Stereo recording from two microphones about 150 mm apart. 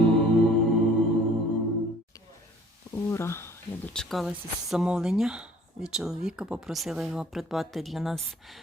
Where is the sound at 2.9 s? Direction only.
20° left (ahead or behind).